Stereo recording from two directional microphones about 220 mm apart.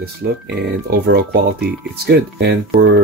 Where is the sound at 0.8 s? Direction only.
45° right (ahead or behind).